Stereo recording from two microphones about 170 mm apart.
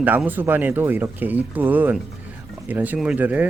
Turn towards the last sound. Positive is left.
turn(degrees=-10)  # may be behind; listen again after turning